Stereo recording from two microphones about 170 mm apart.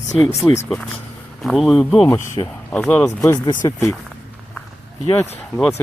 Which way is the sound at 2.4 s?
25° left (ahead or behind).